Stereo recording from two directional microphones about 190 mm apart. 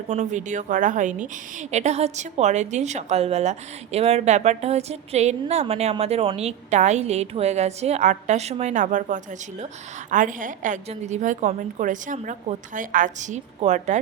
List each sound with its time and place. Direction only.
0.1 s a woman's voice: 40° right (ahead or behind)